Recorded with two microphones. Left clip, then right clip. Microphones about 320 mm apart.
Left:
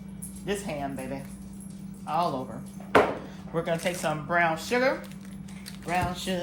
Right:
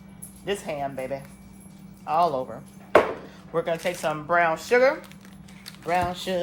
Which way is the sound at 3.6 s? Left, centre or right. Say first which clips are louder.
Right 3 dB; centre.